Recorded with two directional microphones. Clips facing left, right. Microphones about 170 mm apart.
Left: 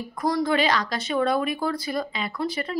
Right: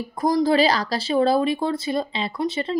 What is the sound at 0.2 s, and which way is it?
Speech, 30° right (ahead or behind).